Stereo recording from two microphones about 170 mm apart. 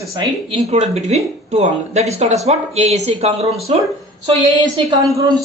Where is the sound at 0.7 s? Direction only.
40° right (ahead or behind).